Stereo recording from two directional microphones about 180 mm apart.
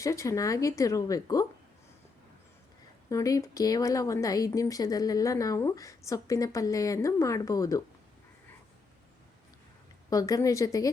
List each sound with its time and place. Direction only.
0.0 s speech: 15° left (ahead or behind)
3.1 s speech: 20° left (ahead or behind)
10.1 s speech: 20° left (ahead or behind)